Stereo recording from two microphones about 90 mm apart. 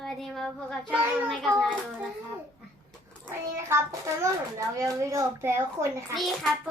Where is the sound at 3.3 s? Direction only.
30° right (ahead or behind).